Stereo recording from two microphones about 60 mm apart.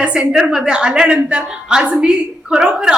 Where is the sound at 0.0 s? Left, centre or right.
Centre.